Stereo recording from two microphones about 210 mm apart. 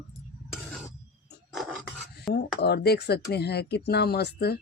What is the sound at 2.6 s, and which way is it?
Speech, 50° left (ahead or behind).